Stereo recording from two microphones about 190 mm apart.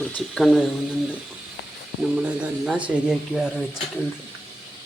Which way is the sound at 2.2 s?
5° right (ahead or behind).